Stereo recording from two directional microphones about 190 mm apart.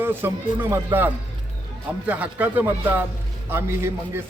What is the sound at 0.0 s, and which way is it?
A man's voice, 10° right (ahead or behind).